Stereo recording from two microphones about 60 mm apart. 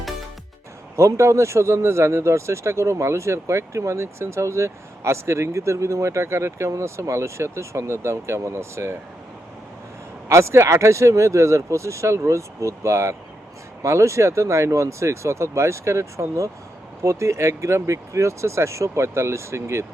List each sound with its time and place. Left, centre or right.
0.9 s speech: right
10.2 s speech: right